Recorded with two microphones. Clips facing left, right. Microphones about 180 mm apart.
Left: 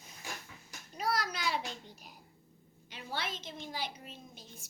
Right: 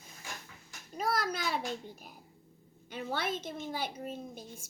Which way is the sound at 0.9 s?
50° right (ahead or behind).